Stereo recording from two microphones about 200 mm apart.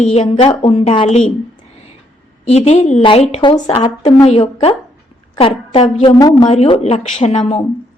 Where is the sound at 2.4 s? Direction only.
30° left (ahead or behind).